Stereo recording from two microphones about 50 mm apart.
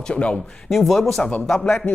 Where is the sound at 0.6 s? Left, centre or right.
Centre.